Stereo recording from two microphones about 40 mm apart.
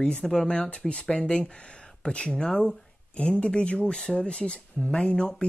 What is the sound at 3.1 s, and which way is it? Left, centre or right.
Speech, left.